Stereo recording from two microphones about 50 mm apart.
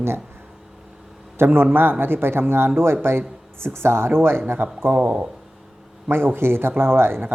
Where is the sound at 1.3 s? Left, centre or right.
Right.